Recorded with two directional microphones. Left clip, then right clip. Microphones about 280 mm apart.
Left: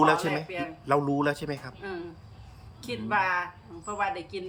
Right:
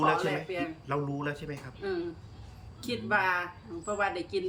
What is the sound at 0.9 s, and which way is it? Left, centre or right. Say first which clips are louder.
Speech: left 11 dB; left.